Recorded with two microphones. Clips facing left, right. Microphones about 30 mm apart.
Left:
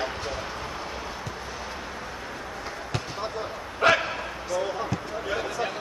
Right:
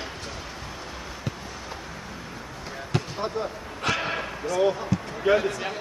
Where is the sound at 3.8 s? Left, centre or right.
Centre.